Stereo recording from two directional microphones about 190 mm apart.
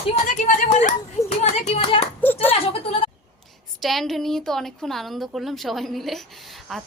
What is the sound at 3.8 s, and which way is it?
A woman's voice, centre (ahead or behind).